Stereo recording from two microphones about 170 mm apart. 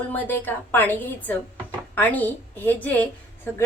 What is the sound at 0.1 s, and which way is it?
A woman's voice, 10° left (ahead or behind).